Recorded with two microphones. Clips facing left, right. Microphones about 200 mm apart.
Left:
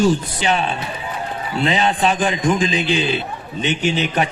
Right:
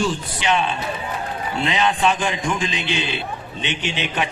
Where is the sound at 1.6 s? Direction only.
35° left (ahead or behind).